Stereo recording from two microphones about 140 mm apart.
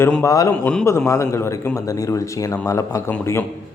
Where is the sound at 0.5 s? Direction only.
10° left (ahead or behind).